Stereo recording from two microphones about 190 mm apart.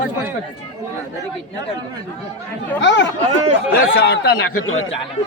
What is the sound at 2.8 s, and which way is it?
Speech, 70° left (ahead or behind).